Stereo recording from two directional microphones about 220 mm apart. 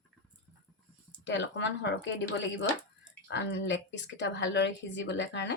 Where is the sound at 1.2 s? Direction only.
55° left (ahead or behind).